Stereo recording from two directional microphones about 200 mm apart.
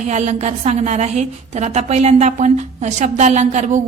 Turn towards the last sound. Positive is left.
turn(degrees=-35)  # may be behind; listen again after turning